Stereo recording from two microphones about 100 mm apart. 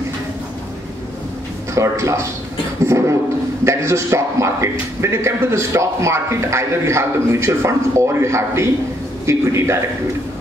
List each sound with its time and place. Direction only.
1.8 s a man's voice: 30° right (ahead or behind)